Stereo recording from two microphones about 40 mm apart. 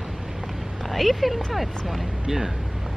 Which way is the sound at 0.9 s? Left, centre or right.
Centre.